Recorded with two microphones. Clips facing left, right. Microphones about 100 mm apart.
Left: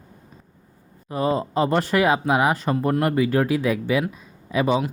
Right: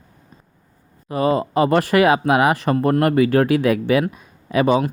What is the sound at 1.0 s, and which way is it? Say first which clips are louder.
Speech: right 4 dB; 75° right (ahead or behind).